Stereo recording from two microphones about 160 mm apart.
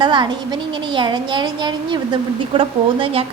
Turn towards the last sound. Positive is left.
turn(degrees=-35)  # may be behind; listen again after turning